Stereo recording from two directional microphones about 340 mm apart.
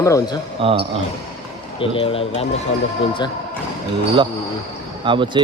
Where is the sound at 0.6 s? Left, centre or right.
Centre.